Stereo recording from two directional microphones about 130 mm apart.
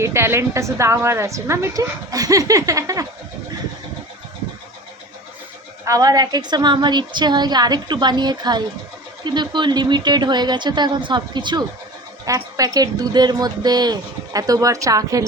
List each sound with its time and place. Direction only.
0.0 s speech: 20° right (ahead or behind)
5.8 s a woman's voice: 25° right (ahead or behind)